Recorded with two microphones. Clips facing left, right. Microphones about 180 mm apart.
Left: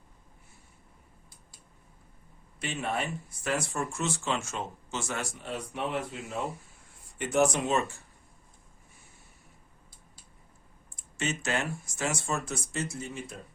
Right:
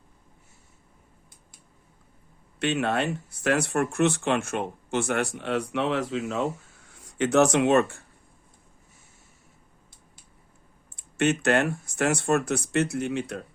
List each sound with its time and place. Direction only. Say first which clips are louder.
2.6 s speech: right 7 dB; 70° right (ahead or behind)
10.9 s speech: right 10 dB; 65° right (ahead or behind)